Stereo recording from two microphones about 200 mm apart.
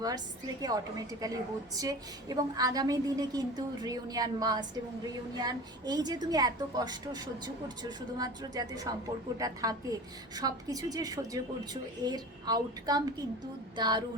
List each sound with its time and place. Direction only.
0.6 s a woman's voice: 20° right (ahead or behind)